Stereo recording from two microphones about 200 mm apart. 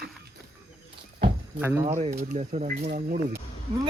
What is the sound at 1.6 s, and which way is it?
Speech, 10° right (ahead or behind).